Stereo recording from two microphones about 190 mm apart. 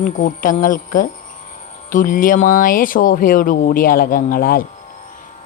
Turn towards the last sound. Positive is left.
turn(degrees=50)  # may be behind; listen again after turning